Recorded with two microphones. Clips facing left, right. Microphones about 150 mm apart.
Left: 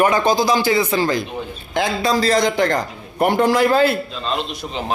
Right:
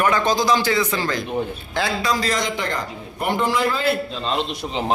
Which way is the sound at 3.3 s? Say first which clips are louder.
Left 6 dB; 65° left (ahead or behind).